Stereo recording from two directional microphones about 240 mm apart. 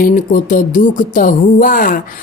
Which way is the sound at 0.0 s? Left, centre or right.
Left.